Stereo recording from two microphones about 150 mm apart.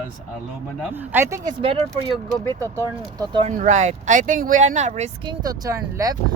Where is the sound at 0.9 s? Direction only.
15° right (ahead or behind).